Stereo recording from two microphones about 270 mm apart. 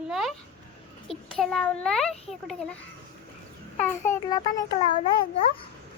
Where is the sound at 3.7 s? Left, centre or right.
Centre.